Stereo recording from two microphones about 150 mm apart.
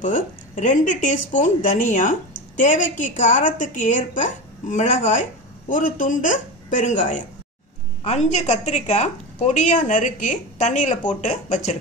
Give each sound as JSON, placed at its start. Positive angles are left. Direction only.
{"t": 0.0, "sound": "a woman's voice", "side_deg": 60}